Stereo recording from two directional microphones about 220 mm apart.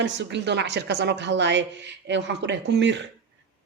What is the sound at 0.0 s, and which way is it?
Speech, 50° right (ahead or behind).